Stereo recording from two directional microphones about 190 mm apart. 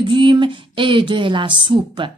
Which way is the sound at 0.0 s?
25° right (ahead or behind).